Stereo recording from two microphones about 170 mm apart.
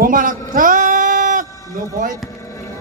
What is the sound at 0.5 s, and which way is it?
Sheep, 50° right (ahead or behind).